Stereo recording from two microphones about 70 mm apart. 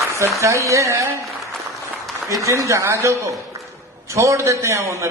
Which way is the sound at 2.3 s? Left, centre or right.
Right.